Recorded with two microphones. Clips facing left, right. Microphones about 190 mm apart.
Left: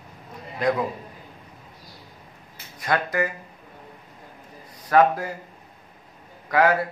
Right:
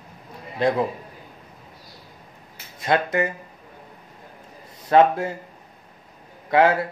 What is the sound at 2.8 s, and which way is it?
Speech, 25° right (ahead or behind).